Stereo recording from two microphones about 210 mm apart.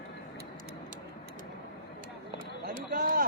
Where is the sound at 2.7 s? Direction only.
40° right (ahead or behind).